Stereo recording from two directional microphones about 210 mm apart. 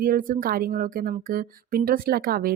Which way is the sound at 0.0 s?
40° right (ahead or behind).